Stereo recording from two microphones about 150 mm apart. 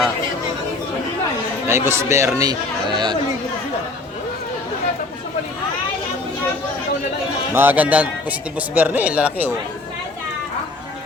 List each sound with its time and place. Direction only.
1.6 s speech: 15° right (ahead or behind)
7.5 s speech: 15° right (ahead or behind)